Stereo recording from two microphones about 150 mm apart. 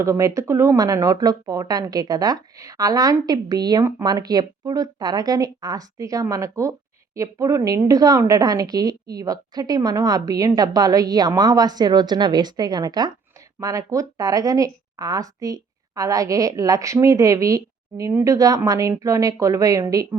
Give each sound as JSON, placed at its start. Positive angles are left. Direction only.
{"t": 0.0, "sound": "speech", "side_deg": -20}